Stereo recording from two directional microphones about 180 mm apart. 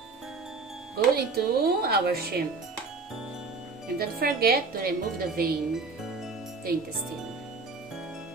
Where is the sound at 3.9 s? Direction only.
55° right (ahead or behind).